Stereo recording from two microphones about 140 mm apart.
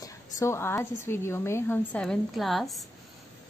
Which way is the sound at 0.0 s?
20° left (ahead or behind).